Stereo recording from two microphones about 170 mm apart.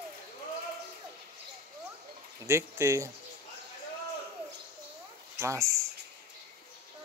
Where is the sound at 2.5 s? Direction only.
15° right (ahead or behind).